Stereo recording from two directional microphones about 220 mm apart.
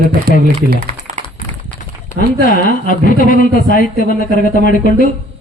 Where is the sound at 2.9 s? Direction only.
40° left (ahead or behind).